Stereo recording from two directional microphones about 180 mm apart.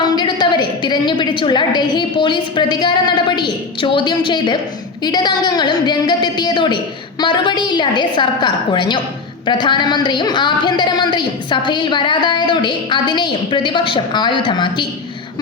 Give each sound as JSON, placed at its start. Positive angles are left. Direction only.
{"t": 0.0, "sound": "a woman's voice", "side_deg": 25}